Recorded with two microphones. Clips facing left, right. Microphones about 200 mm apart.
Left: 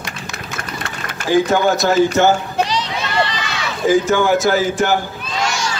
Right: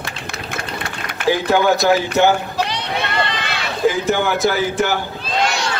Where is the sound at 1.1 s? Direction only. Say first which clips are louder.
Left 2 dB; 60° right (ahead or behind).